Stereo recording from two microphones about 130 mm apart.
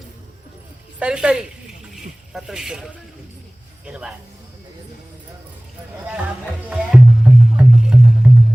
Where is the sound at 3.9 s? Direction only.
5° right (ahead or behind).